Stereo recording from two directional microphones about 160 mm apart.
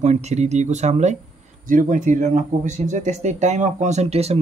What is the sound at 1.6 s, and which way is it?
Speech, 55° right (ahead or behind).